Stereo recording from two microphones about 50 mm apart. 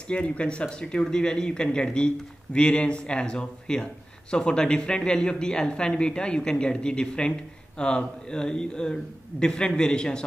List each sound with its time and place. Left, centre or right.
0.1 s speech: left